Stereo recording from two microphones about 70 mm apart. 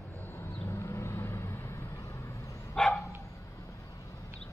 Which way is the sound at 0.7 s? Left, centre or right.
Left.